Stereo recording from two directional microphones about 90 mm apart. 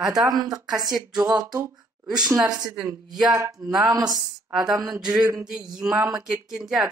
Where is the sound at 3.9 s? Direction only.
40° right (ahead or behind).